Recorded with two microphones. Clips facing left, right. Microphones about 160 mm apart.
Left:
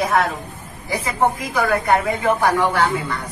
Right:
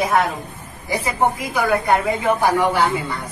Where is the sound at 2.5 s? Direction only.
15° right (ahead or behind).